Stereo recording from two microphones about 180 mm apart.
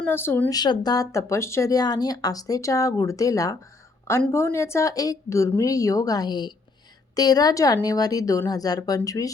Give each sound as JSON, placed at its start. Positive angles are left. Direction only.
{"t": 0.0, "sound": "a woman's voice", "side_deg": 10}
{"t": 0.6, "sound": "a woman's voice", "side_deg": 25}